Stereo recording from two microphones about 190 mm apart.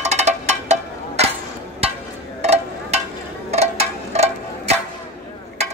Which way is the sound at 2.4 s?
35° right (ahead or behind).